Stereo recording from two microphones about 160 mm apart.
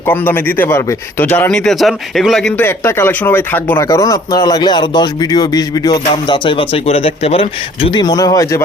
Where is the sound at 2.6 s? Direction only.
15° left (ahead or behind).